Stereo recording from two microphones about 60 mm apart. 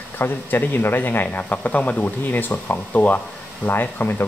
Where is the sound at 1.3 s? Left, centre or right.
Left.